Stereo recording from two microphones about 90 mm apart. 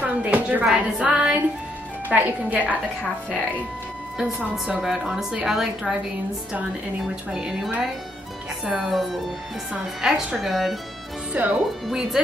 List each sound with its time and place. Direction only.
0.0 s a sound: 15° right (ahead or behind)
0.7 s a woman's voice: 10° right (ahead or behind)
4.2 s a woman's voice: 10° right (ahead or behind)
7.3 s a woman's voice: 5° right (ahead or behind)
11.3 s a woman's voice: 20° right (ahead or behind)
11.8 s a woman's voice: centre (ahead or behind)